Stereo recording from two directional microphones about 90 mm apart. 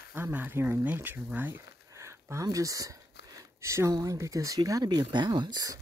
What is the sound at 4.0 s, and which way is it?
Speech, 40° right (ahead or behind).